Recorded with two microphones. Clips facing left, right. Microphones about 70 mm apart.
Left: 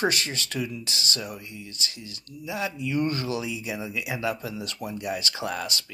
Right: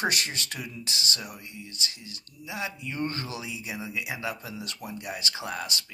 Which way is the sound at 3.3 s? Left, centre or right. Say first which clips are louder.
Left 5 dB; right.